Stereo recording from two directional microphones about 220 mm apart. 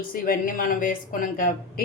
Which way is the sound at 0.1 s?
40° left (ahead or behind).